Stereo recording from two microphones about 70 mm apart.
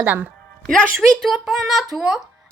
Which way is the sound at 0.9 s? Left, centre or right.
Centre.